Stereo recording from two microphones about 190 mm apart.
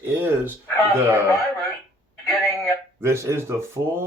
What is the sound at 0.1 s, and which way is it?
Speech, 10° right (ahead or behind).